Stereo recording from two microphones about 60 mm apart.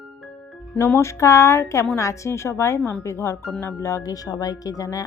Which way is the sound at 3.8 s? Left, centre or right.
Left.